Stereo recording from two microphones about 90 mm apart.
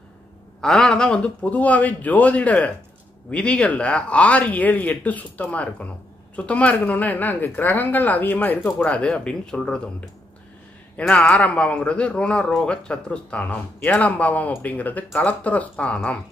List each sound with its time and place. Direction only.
0.6 s speech: 5° left (ahead or behind)